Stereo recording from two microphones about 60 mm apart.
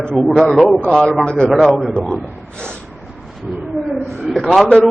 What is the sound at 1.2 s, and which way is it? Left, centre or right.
A man's voice, centre.